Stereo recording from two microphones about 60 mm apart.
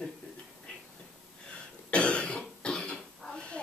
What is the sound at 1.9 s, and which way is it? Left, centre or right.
Cough, centre.